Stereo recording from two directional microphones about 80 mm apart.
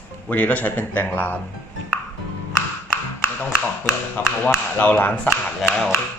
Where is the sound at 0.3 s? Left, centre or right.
Centre.